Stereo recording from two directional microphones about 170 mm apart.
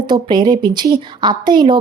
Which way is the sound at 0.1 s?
25° right (ahead or behind).